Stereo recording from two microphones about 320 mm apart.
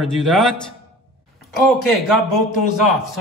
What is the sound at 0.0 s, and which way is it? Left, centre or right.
A man's voice, centre.